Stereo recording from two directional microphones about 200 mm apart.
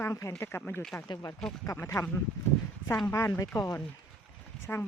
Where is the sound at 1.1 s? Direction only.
20° left (ahead or behind).